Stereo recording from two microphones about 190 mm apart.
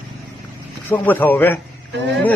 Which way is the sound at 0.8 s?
10° left (ahead or behind).